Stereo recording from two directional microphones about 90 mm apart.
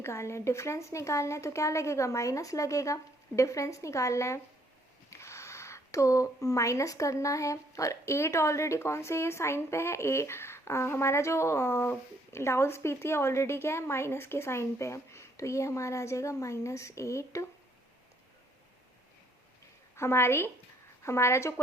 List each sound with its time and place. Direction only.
0.0 s speech: 30° left (ahead or behind)
20.0 s a woman's voice: 30° left (ahead or behind)